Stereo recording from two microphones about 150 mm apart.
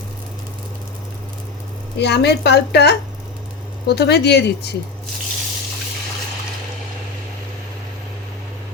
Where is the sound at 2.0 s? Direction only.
90° left.